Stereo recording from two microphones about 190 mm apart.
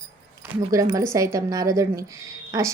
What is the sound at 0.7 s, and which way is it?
A woman's voice, 15° right (ahead or behind).